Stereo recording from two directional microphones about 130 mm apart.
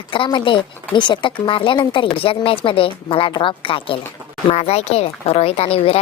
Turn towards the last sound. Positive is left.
turn(degrees=50)  # may be behind; listen again after turning